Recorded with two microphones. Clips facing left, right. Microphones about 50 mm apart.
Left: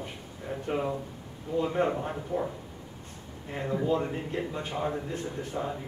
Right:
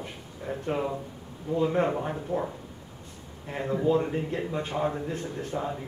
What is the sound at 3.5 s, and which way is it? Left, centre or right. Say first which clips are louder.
A man's voice: right 3 dB; centre.